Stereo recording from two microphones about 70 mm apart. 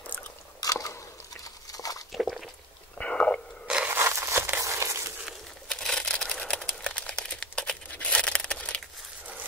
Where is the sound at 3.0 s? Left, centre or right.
Centre.